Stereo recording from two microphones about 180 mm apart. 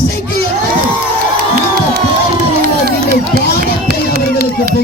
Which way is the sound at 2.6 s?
60° right (ahead or behind).